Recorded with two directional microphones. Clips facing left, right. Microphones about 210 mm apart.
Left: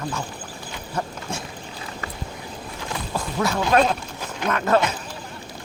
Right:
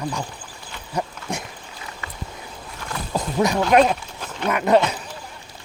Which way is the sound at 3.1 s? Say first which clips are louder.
Right 4 dB; 20° right (ahead or behind).